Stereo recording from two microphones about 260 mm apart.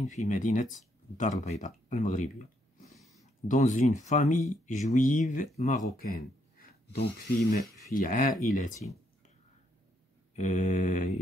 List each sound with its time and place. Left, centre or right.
0.0 s speech: left
3.4 s speech: left
6.9 s speech: left
10.3 s speech: left